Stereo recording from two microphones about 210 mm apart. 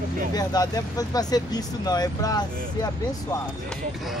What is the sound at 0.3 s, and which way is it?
Speech, 20° left (ahead or behind).